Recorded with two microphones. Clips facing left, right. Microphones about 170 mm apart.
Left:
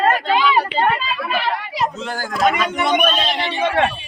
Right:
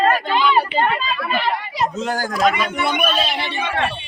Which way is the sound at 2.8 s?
15° left (ahead or behind).